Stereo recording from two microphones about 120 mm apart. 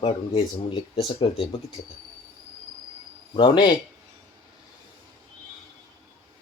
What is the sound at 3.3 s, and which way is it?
Speech, 45° left (ahead or behind).